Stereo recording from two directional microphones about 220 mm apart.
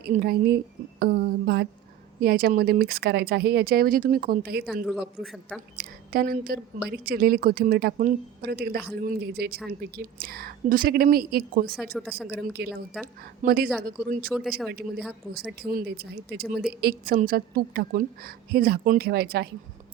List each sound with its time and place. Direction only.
0.0 s speech: 45° right (ahead or behind)
4.6 s a man's voice: centre (ahead or behind)
5.7 s a woman's voice: 40° right (ahead or behind)
11.9 s a man's voice: centre (ahead or behind)
12.3 s speech: 45° right (ahead or behind)